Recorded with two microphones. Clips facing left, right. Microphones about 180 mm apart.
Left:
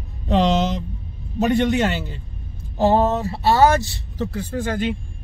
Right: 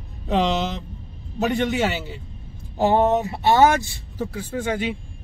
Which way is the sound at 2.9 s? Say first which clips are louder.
Right 3 dB; 20° right (ahead or behind).